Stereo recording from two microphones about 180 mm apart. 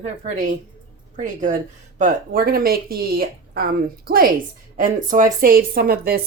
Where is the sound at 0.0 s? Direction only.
45° right (ahead or behind).